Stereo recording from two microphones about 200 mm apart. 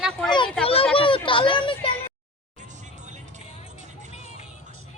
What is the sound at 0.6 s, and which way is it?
A child's voice, 30° left (ahead or behind).